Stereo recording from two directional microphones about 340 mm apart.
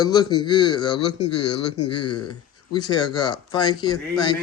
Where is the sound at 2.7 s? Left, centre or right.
Centre.